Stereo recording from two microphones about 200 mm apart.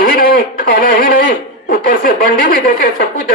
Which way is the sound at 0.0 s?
45° left (ahead or behind).